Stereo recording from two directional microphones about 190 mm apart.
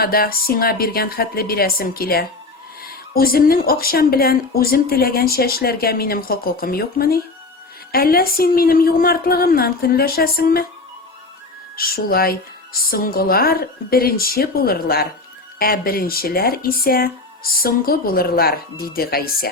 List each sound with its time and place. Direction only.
0.0 s speech: 50° left (ahead or behind)
11.8 s speech: 50° left (ahead or behind)